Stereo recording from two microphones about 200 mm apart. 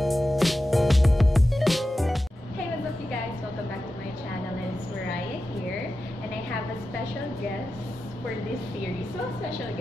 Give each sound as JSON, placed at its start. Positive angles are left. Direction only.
{"t": 0.0, "sound": "music", "side_deg": 0}